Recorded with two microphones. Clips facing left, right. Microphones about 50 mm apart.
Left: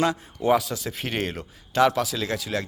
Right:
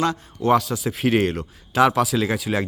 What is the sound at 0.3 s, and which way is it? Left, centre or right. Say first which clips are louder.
Speech: right 4 dB; centre.